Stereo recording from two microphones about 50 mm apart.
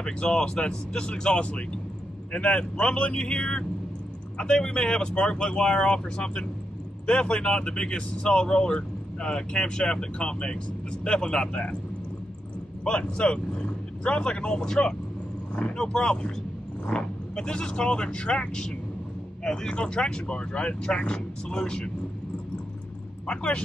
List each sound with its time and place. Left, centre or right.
0.0 s speech: centre
12.8 s speech: centre
23.2 s speech: left